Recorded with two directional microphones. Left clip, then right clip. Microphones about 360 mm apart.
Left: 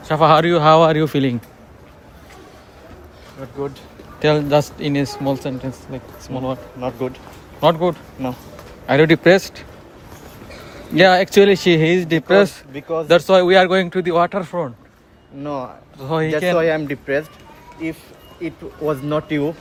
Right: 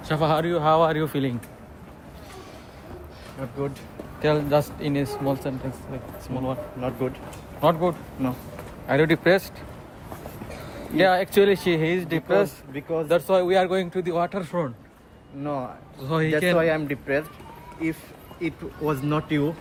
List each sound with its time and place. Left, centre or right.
0.0 s speech: centre
4.2 s speech: left
10.9 s a man's voice: left
16.6 s speech: left
18.4 s a man's voice: centre